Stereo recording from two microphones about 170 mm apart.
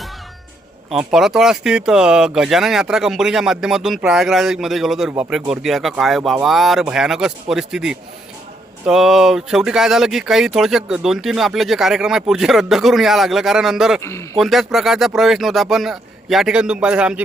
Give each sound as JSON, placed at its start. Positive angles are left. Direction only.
{"t": 0.9, "sound": "speech", "side_deg": 0}
{"t": 14.0, "sound": "speech", "side_deg": 15}
{"t": 14.3, "sound": "speech", "side_deg": 0}